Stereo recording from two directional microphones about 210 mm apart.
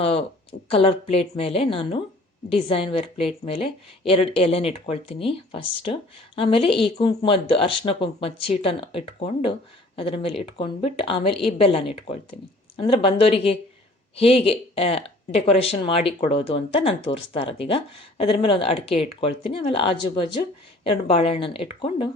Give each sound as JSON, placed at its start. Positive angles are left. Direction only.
{"t": 0.0, "sound": "speech", "side_deg": 25}